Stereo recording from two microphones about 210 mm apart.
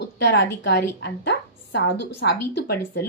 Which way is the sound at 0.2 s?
55° left (ahead or behind).